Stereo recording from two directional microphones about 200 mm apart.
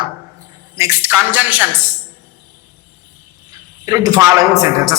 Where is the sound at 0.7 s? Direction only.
10° right (ahead or behind).